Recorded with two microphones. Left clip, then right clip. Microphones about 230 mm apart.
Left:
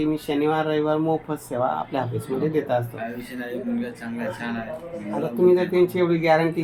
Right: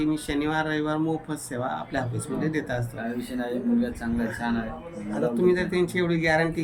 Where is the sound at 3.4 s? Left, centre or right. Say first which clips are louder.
Right 2 dB; right.